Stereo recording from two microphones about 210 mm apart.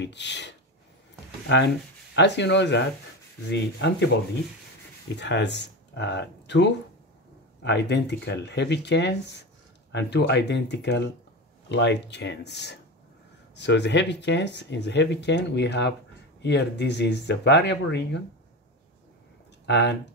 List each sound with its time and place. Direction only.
0.0 s speech: 55° left (ahead or behind)
2.1 s speech: 55° left (ahead or behind)
5.1 s speech: 55° left (ahead or behind)
19.6 s speech: 55° left (ahead or behind)